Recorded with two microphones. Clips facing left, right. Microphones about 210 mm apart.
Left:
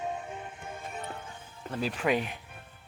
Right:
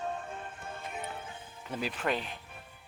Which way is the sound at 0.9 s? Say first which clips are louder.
Even; 10° right (ahead or behind).